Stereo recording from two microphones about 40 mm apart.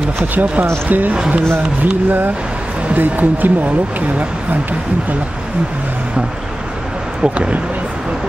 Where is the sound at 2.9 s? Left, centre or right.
Right.